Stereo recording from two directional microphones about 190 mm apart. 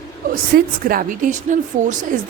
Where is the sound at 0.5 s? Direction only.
50° right (ahead or behind).